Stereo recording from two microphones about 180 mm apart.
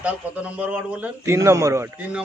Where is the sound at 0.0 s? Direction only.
5° right (ahead or behind).